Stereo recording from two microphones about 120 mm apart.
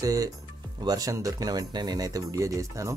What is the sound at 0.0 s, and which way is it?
Speech, 30° right (ahead or behind).